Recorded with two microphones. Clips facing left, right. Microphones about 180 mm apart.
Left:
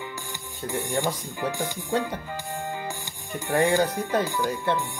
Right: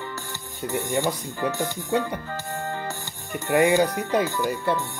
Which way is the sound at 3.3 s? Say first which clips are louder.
Right 3 dB; 15° right (ahead or behind).